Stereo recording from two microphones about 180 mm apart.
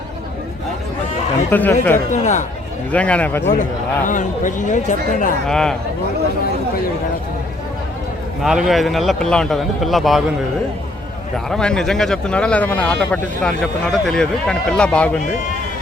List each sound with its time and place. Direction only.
1.5 s speech: 10° left (ahead or behind)
2.0 s speech: 40° left (ahead or behind)
2.9 s speech: 5° left (ahead or behind)
3.6 s speech: 45° left (ahead or behind)
5.5 s speech: 5° left (ahead or behind)
8.4 s speech: centre (ahead or behind)
11.4 s speech: 5° left (ahead or behind)